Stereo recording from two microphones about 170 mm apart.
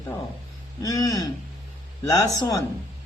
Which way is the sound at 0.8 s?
20° left (ahead or behind).